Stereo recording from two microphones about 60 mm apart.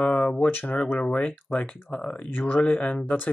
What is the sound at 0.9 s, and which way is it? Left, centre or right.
Speech, left.